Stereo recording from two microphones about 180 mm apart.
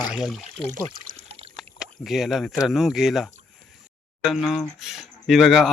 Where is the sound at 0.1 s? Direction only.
Centre (ahead or behind).